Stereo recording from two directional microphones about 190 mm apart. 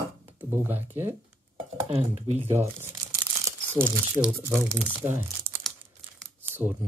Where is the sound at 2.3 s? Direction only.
35° right (ahead or behind).